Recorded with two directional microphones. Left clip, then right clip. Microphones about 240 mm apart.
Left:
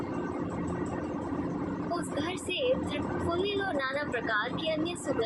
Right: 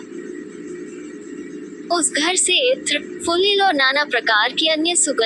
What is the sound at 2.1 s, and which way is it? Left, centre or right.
A woman's voice, right.